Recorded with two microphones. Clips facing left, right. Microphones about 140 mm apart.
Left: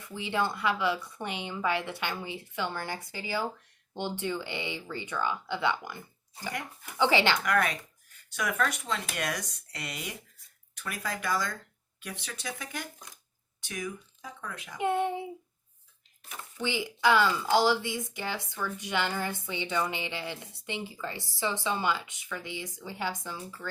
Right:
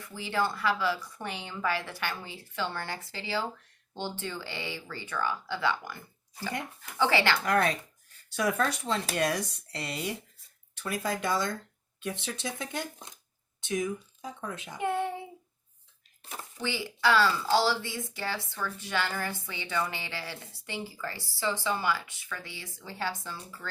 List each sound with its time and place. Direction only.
0.0 s a woman's voice: 20° left (ahead or behind)
7.4 s speech: 30° right (ahead or behind)
14.8 s speech: 20° left (ahead or behind)
16.6 s speech: 20° left (ahead or behind)